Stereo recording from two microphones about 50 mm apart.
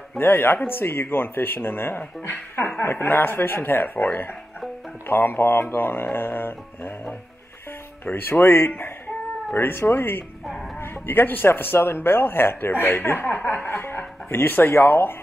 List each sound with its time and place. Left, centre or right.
0.2 s a man's voice: left
10.4 s music: centre
10.8 s a man's voice: left
13.3 s chuckle: left
13.7 s speech: left